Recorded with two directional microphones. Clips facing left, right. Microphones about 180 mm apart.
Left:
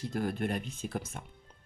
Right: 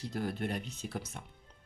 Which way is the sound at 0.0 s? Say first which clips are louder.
Left 3 dB; 50° left (ahead or behind).